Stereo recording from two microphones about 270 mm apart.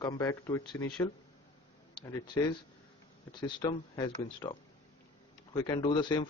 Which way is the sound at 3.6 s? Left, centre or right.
Centre.